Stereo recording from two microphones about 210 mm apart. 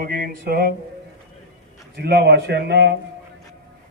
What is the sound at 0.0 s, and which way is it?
Speech, 45° right (ahead or behind).